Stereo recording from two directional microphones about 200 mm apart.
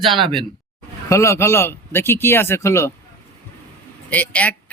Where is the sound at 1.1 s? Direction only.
15° left (ahead or behind).